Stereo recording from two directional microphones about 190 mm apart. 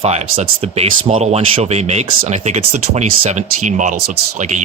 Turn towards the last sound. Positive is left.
turn(degrees=-40)  # may be behind; listen again after turning